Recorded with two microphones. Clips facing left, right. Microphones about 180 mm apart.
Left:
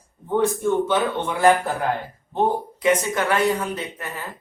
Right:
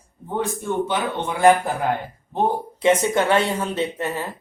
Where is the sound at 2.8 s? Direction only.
25° right (ahead or behind).